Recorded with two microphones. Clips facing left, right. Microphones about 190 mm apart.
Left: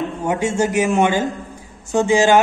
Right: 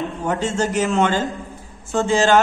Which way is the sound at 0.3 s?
15° left (ahead or behind).